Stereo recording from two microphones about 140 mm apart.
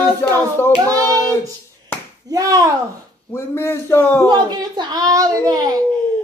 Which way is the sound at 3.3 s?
20° left (ahead or behind).